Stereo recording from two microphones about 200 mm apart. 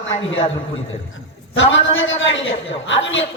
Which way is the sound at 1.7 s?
70° left (ahead or behind).